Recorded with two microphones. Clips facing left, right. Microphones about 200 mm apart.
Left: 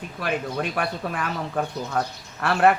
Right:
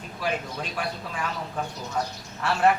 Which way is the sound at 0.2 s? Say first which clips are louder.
Left 4 dB; 60° left (ahead or behind).